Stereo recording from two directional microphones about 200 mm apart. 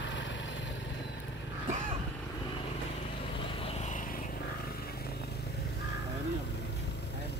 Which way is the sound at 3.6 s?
30° left (ahead or behind).